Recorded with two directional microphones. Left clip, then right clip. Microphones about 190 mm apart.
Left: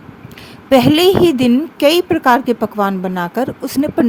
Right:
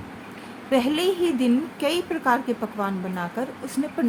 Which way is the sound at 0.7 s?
55° left (ahead or behind).